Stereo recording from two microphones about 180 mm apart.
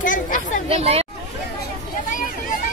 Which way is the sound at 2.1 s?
45° left (ahead or behind).